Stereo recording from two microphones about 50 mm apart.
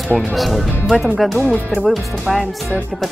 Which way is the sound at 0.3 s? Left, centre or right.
Centre.